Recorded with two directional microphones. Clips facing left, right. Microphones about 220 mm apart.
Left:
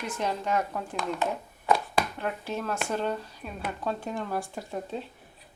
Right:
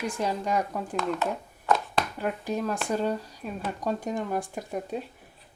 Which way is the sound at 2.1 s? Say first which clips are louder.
Right 3 dB; 10° right (ahead or behind).